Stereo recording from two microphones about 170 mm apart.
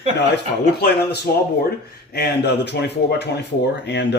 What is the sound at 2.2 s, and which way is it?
A man's voice, 85° left.